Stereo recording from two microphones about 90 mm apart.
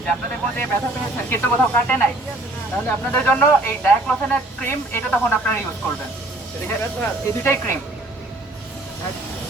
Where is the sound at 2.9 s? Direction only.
20° left (ahead or behind).